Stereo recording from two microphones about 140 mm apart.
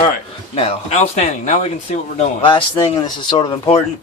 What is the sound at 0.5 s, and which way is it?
Speech, 50° left (ahead or behind).